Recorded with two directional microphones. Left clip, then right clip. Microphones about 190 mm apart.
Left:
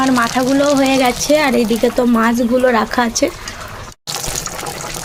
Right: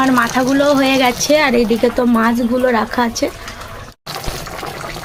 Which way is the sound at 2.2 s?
15° left (ahead or behind).